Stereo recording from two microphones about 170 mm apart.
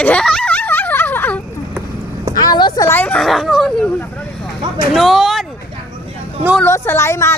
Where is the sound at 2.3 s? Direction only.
25° left (ahead or behind).